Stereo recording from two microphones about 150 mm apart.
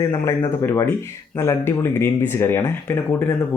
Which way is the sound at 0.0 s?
25° left (ahead or behind).